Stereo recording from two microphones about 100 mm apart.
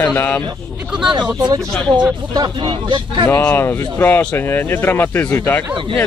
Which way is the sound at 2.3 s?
45° right (ahead or behind).